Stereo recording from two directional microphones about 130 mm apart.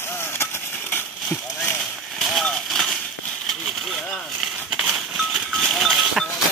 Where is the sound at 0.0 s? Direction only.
20° left (ahead or behind).